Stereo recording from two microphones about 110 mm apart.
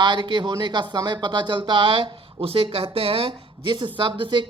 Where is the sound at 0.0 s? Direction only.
45° right (ahead or behind).